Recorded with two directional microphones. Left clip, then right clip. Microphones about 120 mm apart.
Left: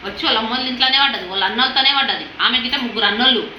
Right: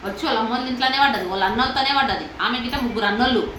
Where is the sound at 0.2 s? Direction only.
15° right (ahead or behind).